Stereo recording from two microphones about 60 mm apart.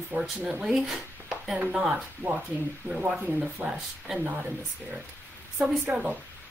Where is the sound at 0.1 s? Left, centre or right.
Right.